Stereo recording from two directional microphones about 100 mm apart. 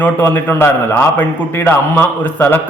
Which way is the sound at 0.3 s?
20° left (ahead or behind).